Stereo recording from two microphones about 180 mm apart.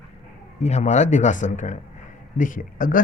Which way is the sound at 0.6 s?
40° left (ahead or behind).